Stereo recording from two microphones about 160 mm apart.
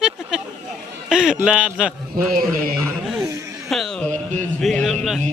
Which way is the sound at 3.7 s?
5° left (ahead or behind).